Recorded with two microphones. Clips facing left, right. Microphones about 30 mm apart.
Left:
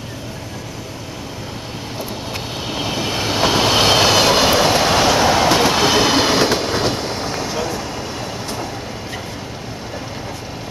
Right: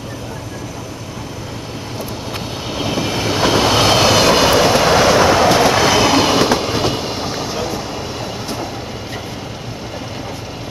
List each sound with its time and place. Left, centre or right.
2.7 s train: centre
4.8 s train: centre
6.5 s train: centre